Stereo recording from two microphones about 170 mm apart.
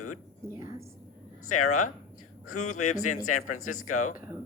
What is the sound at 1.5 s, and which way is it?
Speech, 45° left (ahead or behind).